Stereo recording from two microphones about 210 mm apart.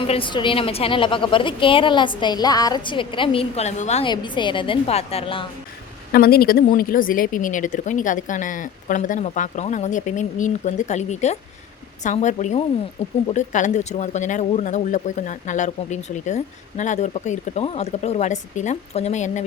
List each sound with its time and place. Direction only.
0.0 s a woman's voice: 25° left (ahead or behind)
6.1 s speech: 45° left (ahead or behind)